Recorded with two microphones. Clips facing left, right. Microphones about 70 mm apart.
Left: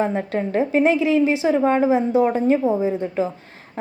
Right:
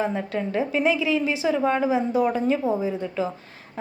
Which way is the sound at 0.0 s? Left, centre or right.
Left.